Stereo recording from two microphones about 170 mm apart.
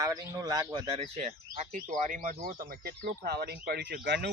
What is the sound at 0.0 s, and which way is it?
Speech, 20° right (ahead or behind).